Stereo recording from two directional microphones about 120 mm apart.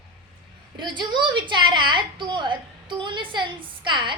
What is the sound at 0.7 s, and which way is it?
A woman's voice, 40° right (ahead or behind).